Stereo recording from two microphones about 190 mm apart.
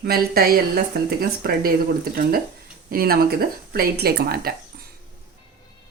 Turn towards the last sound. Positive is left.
turn(degrees=-55)  # may be behind; listen again after turning